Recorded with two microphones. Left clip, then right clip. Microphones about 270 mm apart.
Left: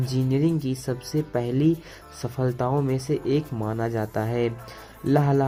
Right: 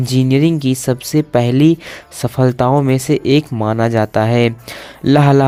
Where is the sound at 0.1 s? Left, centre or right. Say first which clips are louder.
Right 11 dB; right.